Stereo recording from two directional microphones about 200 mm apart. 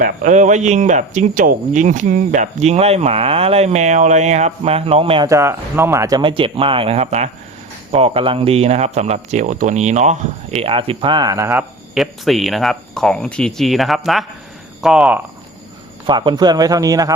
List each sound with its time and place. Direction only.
0.0 s speech: 35° right (ahead or behind)
5.3 s speech: 15° right (ahead or behind)
11.9 s speech: centre (ahead or behind)
16.0 s speech: 20° right (ahead or behind)